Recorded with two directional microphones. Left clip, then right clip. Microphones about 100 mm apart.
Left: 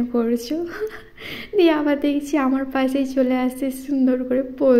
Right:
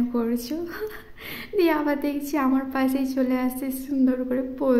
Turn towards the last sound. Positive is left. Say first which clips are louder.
# left 6 dB
turn(degrees=25)  # may be behind; listen again after turning